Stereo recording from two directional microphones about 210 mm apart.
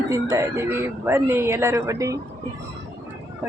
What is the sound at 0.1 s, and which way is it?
Speech, 15° right (ahead or behind).